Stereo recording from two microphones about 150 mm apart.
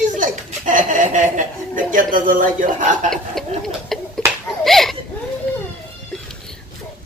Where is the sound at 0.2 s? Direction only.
60° right (ahead or behind).